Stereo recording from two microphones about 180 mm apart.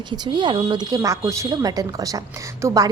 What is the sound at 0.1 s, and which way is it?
A woman's voice, 25° right (ahead or behind).